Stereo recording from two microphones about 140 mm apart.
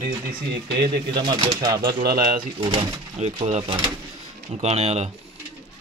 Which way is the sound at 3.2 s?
50° right (ahead or behind).